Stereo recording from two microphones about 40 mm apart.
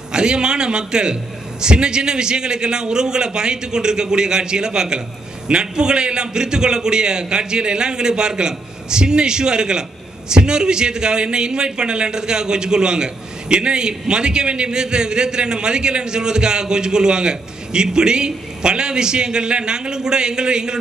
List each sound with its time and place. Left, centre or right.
0.1 s a man's voice: right